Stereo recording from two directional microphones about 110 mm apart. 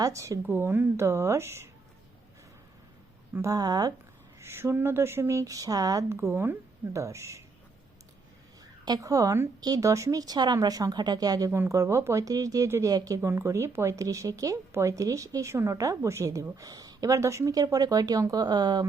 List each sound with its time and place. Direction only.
0.0 s speech: 30° right (ahead or behind)
0.4 s speech: 20° right (ahead or behind)
3.5 s speech: 35° right (ahead or behind)
4.4 s speech: 25° right (ahead or behind)
6.1 s speech: 20° right (ahead or behind)
8.8 s speech: 35° right (ahead or behind)
11.5 s speech: 25° right (ahead or behind)